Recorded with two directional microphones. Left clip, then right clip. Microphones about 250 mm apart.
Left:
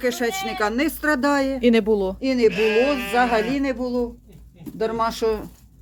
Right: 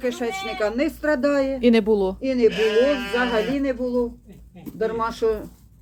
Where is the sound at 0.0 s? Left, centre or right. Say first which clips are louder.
Left 2 dB; left.